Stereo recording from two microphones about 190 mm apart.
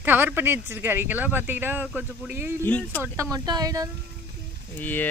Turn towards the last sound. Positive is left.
turn(degrees=10)  # may be behind; listen again after turning